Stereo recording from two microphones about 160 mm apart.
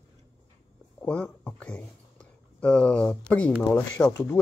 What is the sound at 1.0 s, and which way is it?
Speech, 5° left (ahead or behind).